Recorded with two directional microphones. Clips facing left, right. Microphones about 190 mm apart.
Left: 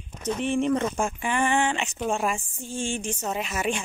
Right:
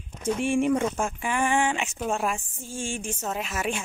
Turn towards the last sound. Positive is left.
turn(degrees=0)  # may be behind; listen again after turning